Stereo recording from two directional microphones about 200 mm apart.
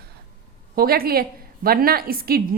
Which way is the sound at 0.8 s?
50° right (ahead or behind).